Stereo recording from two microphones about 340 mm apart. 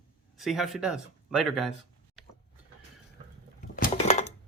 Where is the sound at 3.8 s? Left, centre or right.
Centre.